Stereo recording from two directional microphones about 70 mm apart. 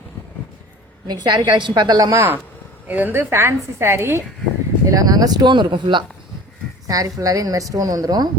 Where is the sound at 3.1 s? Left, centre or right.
Right.